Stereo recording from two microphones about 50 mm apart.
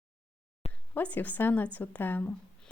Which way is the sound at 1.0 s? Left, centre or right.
Left.